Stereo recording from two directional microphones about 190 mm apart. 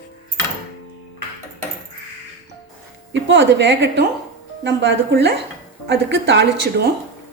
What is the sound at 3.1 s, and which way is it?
A woman's voice, 70° right (ahead or behind).